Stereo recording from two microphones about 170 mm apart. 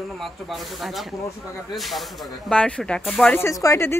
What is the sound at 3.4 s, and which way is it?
Speech, 15° left (ahead or behind).